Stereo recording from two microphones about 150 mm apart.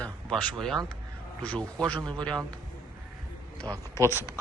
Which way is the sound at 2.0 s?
30° right (ahead or behind).